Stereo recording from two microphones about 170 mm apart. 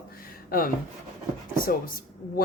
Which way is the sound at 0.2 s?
60° left (ahead or behind).